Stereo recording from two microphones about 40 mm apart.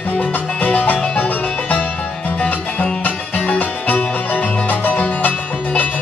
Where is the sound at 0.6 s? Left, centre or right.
Left.